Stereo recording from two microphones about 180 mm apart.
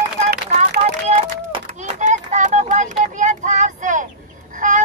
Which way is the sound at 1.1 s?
40° right (ahead or behind).